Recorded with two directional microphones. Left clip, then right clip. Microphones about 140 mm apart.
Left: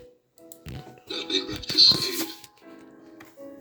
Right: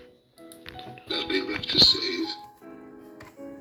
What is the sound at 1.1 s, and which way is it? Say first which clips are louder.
Music: right 1 dB; 10° right (ahead or behind).